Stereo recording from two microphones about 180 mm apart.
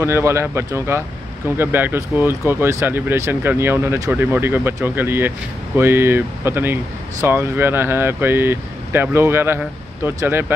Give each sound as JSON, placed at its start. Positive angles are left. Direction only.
{"t": 0.0, "sound": "speech", "side_deg": -15}